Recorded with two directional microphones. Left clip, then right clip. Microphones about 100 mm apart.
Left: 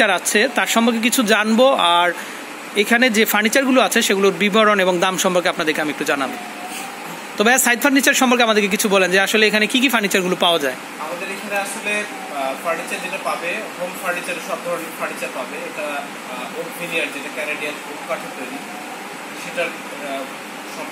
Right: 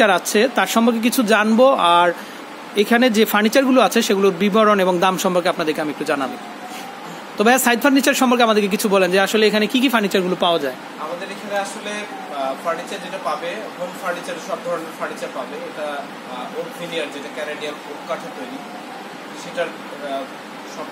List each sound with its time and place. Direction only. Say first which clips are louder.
0.0 s a man's voice: right 1 dB; 20° right (ahead or behind)
2.7 s speech: even; 20° right (ahead or behind); by 6.3 s 5° right (ahead or behind)
7.3 s a man's voice: even; 10° right (ahead or behind)
10.0 s speech: left 1 dB; centre (ahead or behind)